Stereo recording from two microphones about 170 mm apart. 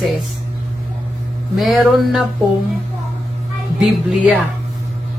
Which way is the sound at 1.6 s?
Centre (ahead or behind).